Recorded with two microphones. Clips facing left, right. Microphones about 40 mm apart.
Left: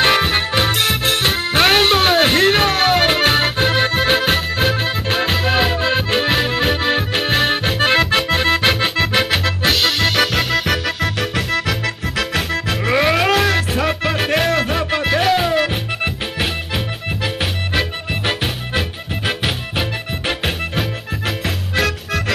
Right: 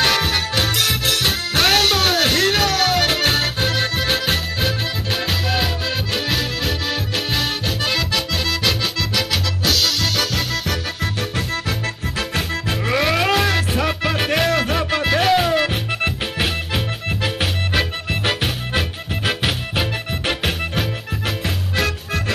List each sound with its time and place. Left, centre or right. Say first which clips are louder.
0.0 s music: left 3 dB; left
11.0 s music: left 4 dB; left
12.8 s music: left 3 dB; centre